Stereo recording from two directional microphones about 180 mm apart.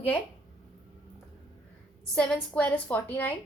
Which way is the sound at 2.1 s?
5° left (ahead or behind).